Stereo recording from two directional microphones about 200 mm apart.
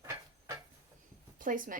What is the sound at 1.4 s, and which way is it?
Speech, 40° right (ahead or behind).